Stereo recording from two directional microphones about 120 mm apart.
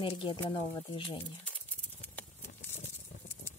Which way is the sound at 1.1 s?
15° left (ahead or behind).